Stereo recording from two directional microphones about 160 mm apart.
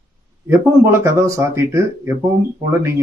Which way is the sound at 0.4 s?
15° right (ahead or behind).